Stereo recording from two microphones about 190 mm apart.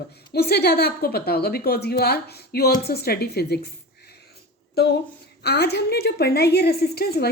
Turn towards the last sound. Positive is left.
turn(degrees=55)  # may be behind; listen again after turning